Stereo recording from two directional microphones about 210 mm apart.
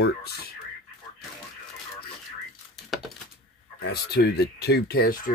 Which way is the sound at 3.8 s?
50° left (ahead or behind).